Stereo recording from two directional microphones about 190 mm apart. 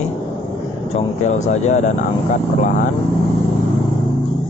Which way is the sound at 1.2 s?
40° left (ahead or behind).